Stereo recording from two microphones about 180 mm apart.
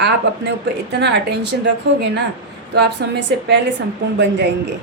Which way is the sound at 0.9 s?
70° right (ahead or behind).